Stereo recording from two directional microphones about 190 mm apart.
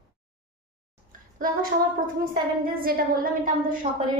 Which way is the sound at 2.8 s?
50° right (ahead or behind).